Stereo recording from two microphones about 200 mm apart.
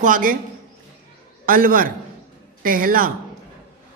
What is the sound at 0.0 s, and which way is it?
Speech, 40° right (ahead or behind).